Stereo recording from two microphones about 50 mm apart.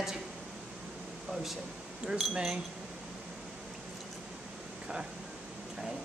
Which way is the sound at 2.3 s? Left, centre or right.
Centre.